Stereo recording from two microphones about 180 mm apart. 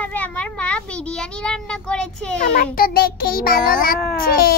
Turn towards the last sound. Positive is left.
turn(degrees=55)  # may be behind; listen again after turning